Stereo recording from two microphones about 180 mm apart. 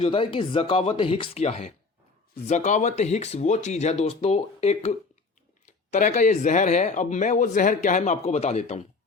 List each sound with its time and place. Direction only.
0.0 s speech: 30° left (ahead or behind)